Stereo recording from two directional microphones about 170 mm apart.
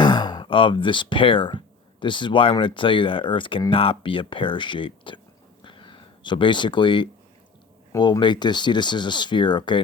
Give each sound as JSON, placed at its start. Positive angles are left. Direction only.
{"t": 0.0, "sound": "speech", "side_deg": 25}
{"t": 5.6, "sound": "a sound", "side_deg": 30}
{"t": 7.9, "sound": "speech", "side_deg": 25}